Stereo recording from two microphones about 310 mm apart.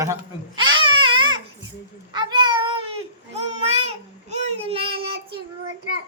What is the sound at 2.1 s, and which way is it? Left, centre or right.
A child's voice, centre.